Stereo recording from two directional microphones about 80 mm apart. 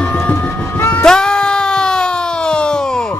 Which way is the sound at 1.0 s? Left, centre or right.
Centre.